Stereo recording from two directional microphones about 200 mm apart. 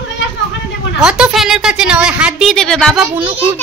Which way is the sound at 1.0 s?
5° right (ahead or behind).